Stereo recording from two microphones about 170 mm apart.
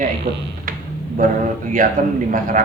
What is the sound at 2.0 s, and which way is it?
Speech, 50° right (ahead or behind).